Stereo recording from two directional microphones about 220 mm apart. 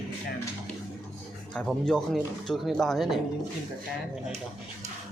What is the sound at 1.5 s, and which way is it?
Speech, centre (ahead or behind).